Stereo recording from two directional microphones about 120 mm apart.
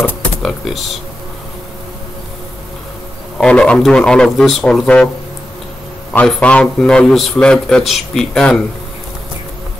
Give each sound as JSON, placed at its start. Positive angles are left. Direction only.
{"t": 0.0, "sound": "a sound", "side_deg": 5}
{"t": 3.3, "sound": "a man's voice", "side_deg": 5}
{"t": 6.1, "sound": "a man's voice", "side_deg": 10}